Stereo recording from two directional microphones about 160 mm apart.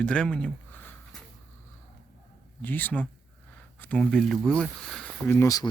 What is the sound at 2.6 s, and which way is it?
Speech, 10° left (ahead or behind).